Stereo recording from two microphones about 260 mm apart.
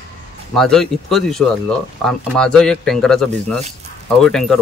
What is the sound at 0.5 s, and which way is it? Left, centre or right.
Speech, centre.